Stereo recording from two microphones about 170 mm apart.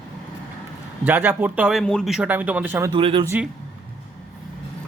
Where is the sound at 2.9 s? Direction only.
30° right (ahead or behind).